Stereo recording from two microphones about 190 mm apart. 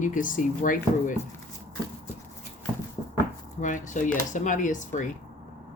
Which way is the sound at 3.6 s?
40° left (ahead or behind).